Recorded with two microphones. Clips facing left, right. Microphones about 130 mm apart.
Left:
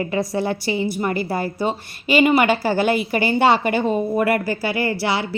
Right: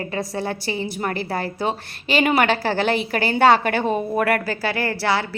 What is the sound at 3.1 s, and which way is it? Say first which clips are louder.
Speech: right 2 dB; 45° right (ahead or behind).